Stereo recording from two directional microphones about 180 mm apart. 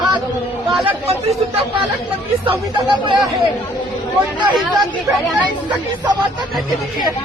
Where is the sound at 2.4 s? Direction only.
25° right (ahead or behind).